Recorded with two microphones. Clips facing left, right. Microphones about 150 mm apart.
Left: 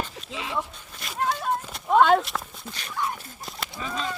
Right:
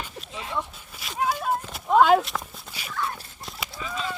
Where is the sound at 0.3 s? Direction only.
90° left.